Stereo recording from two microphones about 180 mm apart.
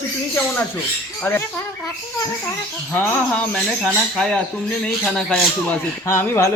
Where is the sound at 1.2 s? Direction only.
15° left (ahead or behind).